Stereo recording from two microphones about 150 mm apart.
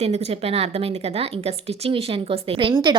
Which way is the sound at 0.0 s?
45° right (ahead or behind).